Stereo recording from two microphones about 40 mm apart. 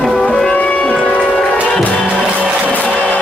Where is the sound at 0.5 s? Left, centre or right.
Left.